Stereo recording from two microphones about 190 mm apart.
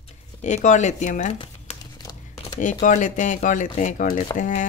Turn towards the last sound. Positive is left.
turn(degrees=40)  # may be behind; listen again after turning